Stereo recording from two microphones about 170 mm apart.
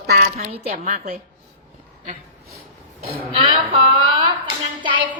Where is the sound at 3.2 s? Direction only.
30° right (ahead or behind).